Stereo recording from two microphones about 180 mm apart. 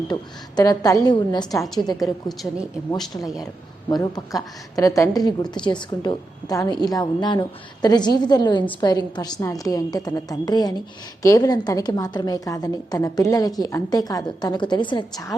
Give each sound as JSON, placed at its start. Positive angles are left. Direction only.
{"t": 0.1, "sound": "a woman's voice", "side_deg": 20}
{"t": 1.6, "sound": "a woman's voice", "side_deg": 0}
{"t": 3.8, "sound": "a woman's voice", "side_deg": 20}